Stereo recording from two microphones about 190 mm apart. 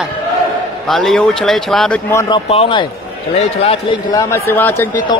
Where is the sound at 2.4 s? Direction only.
30° left (ahead or behind).